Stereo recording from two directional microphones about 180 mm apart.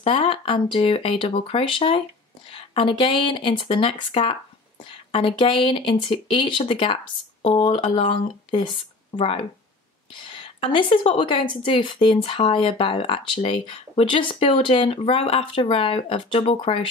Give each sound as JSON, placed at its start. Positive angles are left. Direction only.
{"t": 0.0, "sound": "a woman's voice", "side_deg": 30}